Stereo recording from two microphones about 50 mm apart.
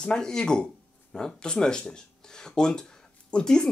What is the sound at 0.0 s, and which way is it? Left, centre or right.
Speech, centre.